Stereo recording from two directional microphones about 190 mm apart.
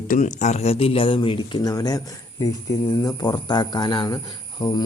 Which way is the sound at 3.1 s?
20° left (ahead or behind).